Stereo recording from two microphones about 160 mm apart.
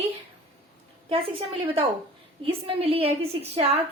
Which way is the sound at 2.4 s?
35° right (ahead or behind).